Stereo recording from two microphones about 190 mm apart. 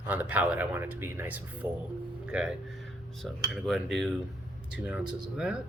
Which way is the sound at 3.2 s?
Centre (ahead or behind).